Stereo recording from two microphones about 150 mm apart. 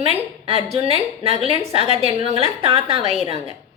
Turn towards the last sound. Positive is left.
turn(degrees=-40)  # may be behind; listen again after turning